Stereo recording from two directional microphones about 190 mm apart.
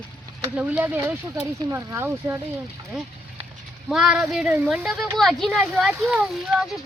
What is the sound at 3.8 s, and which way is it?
Speech, 5° right (ahead or behind).